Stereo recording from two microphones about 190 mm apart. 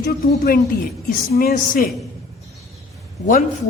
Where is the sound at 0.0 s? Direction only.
50° left (ahead or behind).